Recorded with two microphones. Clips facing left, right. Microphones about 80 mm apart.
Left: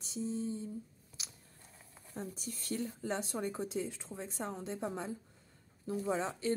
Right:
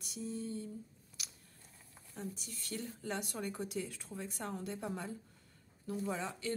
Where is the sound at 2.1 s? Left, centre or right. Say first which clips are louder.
Left 3 dB; left.